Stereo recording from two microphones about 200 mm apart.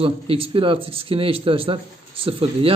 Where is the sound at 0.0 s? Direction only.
30° right (ahead or behind).